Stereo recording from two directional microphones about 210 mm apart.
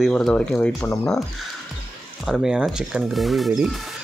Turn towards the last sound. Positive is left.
turn(degrees=0)  # may be behind; listen again after turning